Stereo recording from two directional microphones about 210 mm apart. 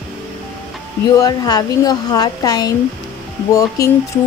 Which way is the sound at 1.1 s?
20° left (ahead or behind).